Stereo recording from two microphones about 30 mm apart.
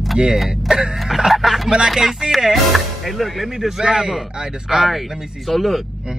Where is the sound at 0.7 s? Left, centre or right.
Right.